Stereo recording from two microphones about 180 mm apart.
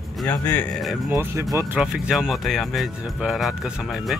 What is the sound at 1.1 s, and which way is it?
Speech, 15° right (ahead or behind).